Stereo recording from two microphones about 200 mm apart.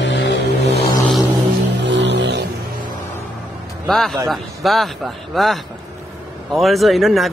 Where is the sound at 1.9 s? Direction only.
60° right (ahead or behind).